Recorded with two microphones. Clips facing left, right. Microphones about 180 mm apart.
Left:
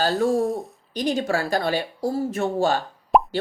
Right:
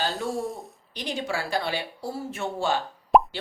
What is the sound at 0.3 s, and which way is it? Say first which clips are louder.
Speech: left 8 dB; centre (ahead or behind).